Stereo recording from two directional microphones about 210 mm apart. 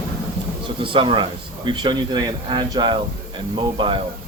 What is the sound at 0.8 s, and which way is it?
Speech, 25° right (ahead or behind).